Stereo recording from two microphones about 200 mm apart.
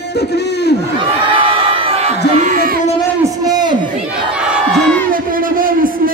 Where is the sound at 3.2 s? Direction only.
20° right (ahead or behind).